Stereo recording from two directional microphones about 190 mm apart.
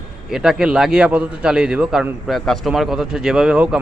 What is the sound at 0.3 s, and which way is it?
A man's voice, 5° right (ahead or behind).